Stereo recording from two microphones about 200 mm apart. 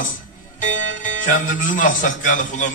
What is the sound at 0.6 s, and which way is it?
Speech, 40° left (ahead or behind).